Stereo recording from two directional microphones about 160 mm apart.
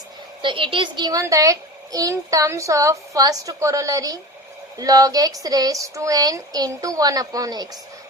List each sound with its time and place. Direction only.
0.4 s a child's voice: 30° right (ahead or behind)